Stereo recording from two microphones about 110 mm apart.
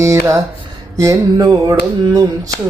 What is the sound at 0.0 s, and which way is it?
Speech, 30° right (ahead or behind).